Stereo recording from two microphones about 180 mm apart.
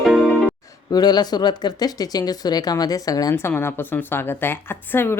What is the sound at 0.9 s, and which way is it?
Speech, 20° left (ahead or behind).